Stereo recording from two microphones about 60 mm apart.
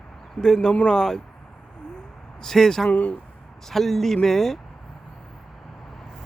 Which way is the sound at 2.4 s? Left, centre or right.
Centre.